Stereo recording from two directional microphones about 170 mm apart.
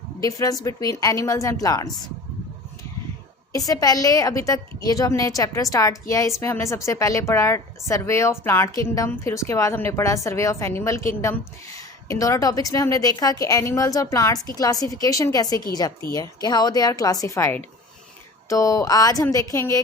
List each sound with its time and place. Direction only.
0.2 s a woman's voice: 20° left (ahead or behind)
3.7 s a woman's voice: 20° left (ahead or behind)